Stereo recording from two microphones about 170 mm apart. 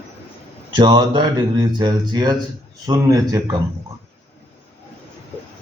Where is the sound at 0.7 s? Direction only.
25° right (ahead or behind).